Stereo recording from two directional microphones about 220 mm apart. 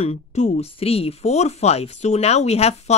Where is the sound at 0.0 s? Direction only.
30° left (ahead or behind).